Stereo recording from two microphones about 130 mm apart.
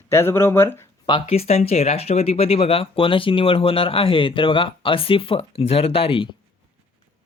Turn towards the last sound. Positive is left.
turn(degrees=45)  # may be behind; listen again after turning